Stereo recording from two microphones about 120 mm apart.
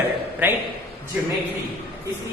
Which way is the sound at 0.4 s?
15° right (ahead or behind).